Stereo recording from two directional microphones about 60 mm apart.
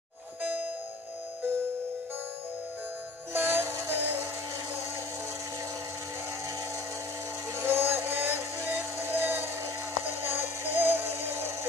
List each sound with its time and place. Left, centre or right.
3.3 s music: right
7.5 s music: right